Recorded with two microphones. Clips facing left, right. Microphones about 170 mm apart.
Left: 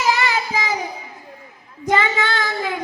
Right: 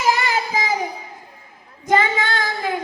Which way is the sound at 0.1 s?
45° right (ahead or behind).